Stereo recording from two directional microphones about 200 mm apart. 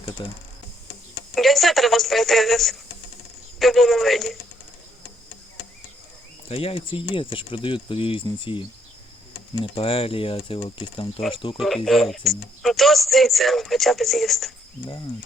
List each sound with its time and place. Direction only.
0.2 s speech: 25° left (ahead or behind)
1.4 s a woman's voice: centre (ahead or behind)
6.5 s speech: 25° left (ahead or behind)
9.7 s speech: 30° left (ahead or behind)
11.9 s speech: centre (ahead or behind)